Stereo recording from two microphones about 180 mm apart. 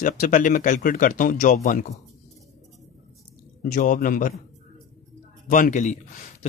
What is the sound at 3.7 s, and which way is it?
Speech, 50° left (ahead or behind).